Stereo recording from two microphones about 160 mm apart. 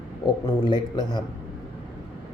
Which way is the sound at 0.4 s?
25° left (ahead or behind).